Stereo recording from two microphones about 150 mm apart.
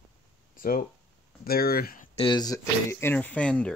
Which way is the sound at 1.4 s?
90° left.